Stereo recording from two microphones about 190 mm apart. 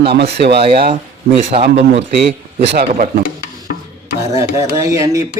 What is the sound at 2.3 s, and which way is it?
Speech, 60° right (ahead or behind).